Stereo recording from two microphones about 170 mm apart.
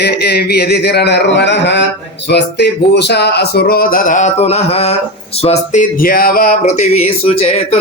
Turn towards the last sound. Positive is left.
turn(degrees=35)  # may be behind; listen again after turning